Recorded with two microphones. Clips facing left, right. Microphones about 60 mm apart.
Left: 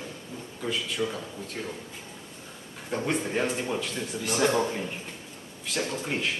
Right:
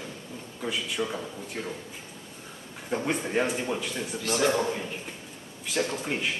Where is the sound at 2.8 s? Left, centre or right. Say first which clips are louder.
Even; centre.